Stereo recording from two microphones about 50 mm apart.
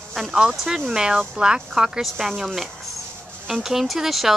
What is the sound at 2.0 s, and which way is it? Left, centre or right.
Speech, centre.